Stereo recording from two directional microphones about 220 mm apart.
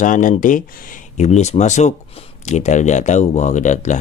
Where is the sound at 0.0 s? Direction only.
35° left (ahead or behind).